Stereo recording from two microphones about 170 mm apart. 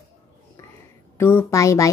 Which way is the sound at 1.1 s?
15° left (ahead or behind).